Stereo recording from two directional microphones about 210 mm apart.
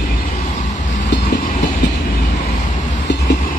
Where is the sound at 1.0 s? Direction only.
55° left (ahead or behind).